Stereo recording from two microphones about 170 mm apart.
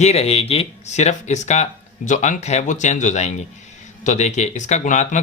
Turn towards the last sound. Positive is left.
turn(degrees=45)  # may be behind; listen again after turning